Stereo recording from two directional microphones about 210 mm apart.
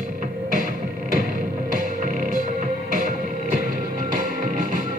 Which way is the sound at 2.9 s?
40° right (ahead or behind).